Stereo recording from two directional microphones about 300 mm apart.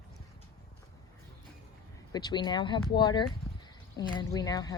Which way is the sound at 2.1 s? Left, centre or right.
Centre.